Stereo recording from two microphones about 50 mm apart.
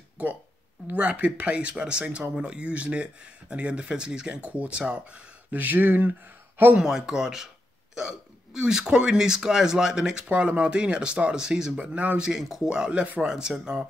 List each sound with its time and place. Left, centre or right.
0.2 s speech: right
5.6 s speech: right
6.8 s speech: centre
10.3 s speech: right
11.8 s speech: right
12.2 s speech: centre
13.0 s speech: right
13.3 s speech: centre